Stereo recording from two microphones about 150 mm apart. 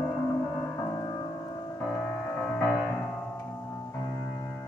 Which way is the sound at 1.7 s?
10° left (ahead or behind).